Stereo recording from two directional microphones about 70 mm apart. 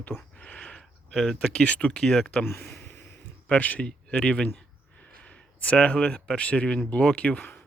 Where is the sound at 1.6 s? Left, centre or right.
Centre.